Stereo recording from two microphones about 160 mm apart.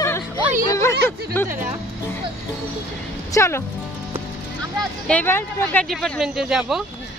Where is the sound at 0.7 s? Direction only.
15° left (ahead or behind).